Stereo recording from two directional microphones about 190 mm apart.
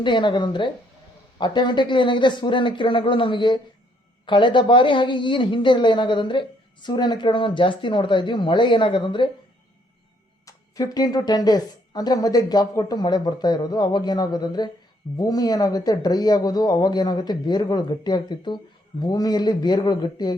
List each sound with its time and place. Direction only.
0.0 s speech: 25° left (ahead or behind)
10.4 s speech: 20° left (ahead or behind)